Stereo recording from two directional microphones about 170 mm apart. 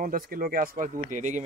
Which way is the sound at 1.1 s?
45° right (ahead or behind).